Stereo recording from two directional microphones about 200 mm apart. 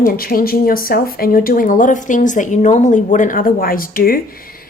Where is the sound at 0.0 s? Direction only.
45° left (ahead or behind).